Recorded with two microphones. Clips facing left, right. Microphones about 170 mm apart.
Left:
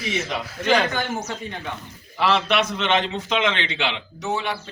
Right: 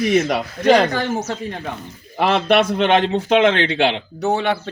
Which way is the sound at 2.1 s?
50° right (ahead or behind).